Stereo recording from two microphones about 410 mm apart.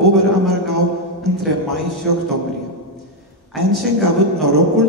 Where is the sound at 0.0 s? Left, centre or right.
Right.